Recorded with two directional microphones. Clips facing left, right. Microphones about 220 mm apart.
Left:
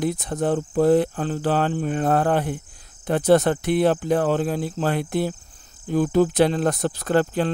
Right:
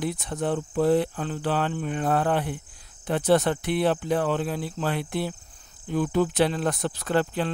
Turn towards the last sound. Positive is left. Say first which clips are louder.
# left 4 dB
turn(degrees=45)  # may be behind; listen again after turning